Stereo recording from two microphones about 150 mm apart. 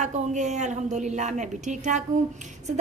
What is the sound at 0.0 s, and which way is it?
A woman's voice, 55° right (ahead or behind).